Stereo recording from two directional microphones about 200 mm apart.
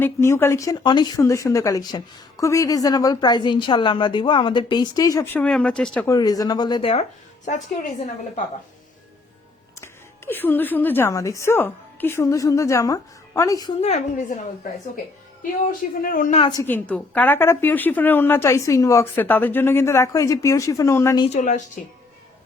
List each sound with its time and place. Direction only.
0.0 s speech: 10° left (ahead or behind)
6.1 s speech: 20° left (ahead or behind)
7.4 s a woman's voice: 35° left (ahead or behind)
9.8 s a woman's voice: 10° left (ahead or behind)
13.8 s a woman's voice: 35° left (ahead or behind)
16.0 s a woman's voice: 40° left (ahead or behind)
16.4 s speech: 20° left (ahead or behind)
21.2 s a woman's voice: 40° left (ahead or behind)